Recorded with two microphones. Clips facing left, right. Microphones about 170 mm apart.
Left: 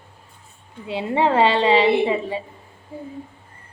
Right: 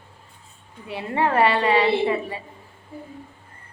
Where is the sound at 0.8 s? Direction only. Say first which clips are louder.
Left 3 dB; 20° left (ahead or behind).